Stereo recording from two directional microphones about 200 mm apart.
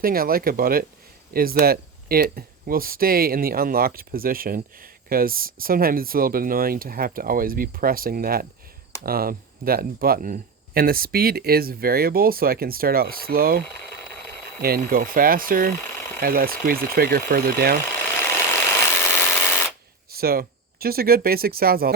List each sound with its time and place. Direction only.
0.0 s speech: 45° right (ahead or behind)
18.9 s a sound: 10° left (ahead or behind)
20.1 s speech: 50° right (ahead or behind)